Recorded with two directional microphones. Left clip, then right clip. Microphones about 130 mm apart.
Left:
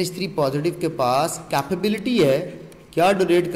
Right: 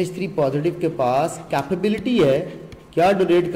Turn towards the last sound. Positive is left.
turn(degrees=5)  # may be behind; listen again after turning